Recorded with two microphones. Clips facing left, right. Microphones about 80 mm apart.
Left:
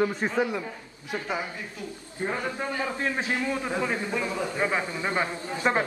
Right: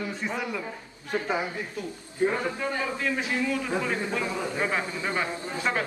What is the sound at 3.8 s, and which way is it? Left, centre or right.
Speech, centre.